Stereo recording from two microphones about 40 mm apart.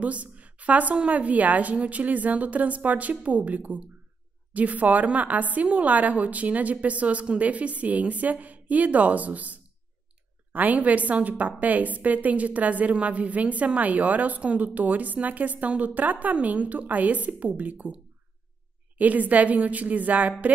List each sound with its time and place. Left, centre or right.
0.0 s a woman's voice: right
18.9 s a woman's voice: right